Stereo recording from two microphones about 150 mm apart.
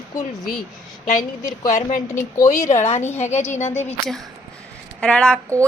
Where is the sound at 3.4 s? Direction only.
15° left (ahead or behind).